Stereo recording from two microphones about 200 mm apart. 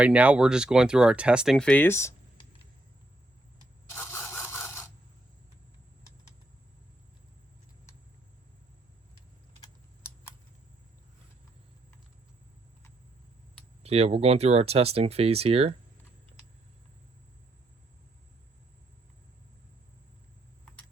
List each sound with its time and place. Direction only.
0.0 s speech: 5° right (ahead or behind); by 2.1 s 15° left (ahead or behind)
3.8 s camera: 10° left (ahead or behind)
13.8 s speech: 30° right (ahead or behind)